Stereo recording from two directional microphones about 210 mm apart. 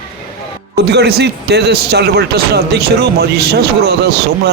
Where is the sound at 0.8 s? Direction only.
50° right (ahead or behind).